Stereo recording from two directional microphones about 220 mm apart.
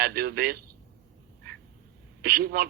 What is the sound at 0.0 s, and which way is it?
Speech, 45° right (ahead or behind).